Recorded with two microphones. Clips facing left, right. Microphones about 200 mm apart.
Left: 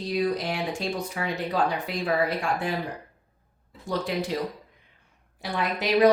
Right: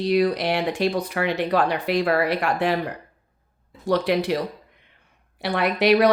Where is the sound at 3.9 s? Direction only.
70° right (ahead or behind).